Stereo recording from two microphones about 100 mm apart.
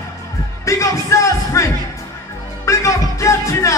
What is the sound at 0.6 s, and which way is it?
Music, 30° left (ahead or behind).